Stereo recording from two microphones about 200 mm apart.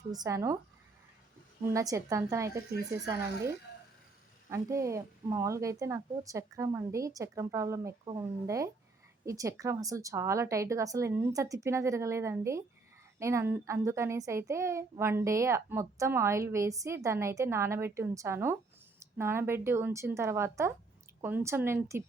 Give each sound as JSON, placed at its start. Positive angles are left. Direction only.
{"t": 0.1, "sound": "a child's voice", "side_deg": -15}
{"t": 1.7, "sound": "a child's voice", "side_deg": -15}
{"t": 4.4, "sound": "a child's voice", "side_deg": -15}